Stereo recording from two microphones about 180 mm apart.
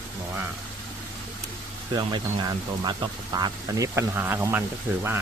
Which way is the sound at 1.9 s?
25° right (ahead or behind).